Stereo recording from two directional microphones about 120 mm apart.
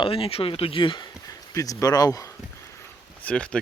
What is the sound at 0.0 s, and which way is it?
Speech, 50° left (ahead or behind).